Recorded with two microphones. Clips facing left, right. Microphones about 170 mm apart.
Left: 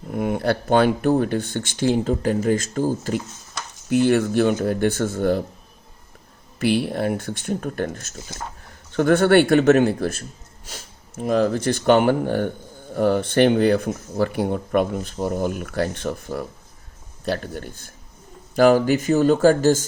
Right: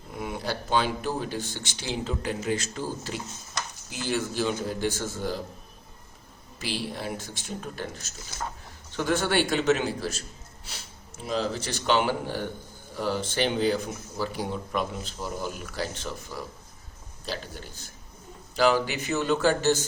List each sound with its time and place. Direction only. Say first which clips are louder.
0.1 s speech: left 10 dB; 55° left (ahead or behind)
3.8 s speech: left 13 dB; 60° left (ahead or behind)
6.6 s speech: left 12 dB; 60° left (ahead or behind)